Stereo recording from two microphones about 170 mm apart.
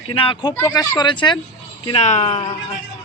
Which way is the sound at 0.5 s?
20° left (ahead or behind).